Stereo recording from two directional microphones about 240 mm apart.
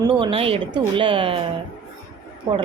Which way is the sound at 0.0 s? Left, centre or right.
Right.